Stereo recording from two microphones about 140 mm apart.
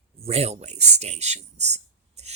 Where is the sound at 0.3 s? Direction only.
50° right (ahead or behind).